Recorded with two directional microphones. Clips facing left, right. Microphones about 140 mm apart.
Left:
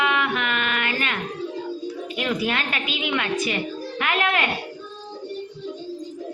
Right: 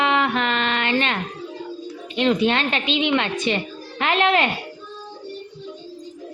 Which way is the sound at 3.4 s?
30° right (ahead or behind).